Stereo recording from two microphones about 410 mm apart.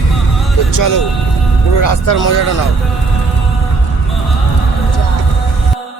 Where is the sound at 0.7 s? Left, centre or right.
Left.